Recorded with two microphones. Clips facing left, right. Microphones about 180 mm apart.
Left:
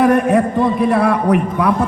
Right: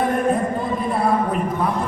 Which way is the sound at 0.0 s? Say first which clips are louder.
Left 7 dB; 75° left (ahead or behind).